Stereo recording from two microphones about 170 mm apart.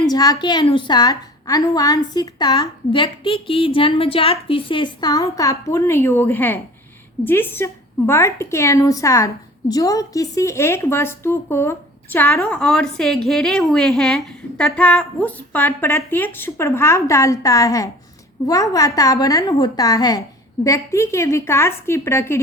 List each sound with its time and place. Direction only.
0.0 s a woman's voice: 20° left (ahead or behind)